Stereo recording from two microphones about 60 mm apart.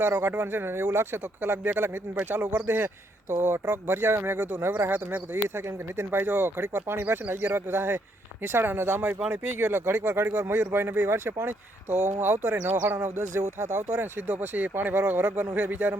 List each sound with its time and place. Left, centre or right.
0.0 s speech: right
5.5 s speech: right